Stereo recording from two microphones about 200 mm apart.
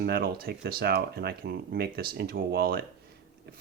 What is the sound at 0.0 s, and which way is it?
Speech, 50° right (ahead or behind).